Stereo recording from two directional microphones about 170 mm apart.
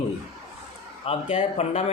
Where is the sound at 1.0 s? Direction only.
40° left (ahead or behind).